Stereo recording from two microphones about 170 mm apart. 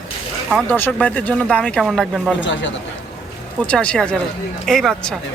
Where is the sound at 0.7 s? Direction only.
10° left (ahead or behind).